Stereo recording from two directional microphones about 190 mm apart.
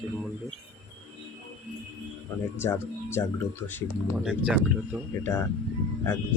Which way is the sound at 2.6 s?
15° left (ahead or behind).